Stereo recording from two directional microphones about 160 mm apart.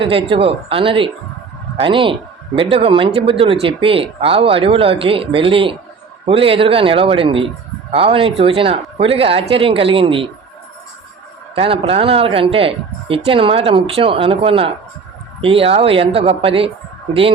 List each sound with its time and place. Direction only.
0.0 s speech: 35° right (ahead or behind)
11.5 s speech: 35° right (ahead or behind)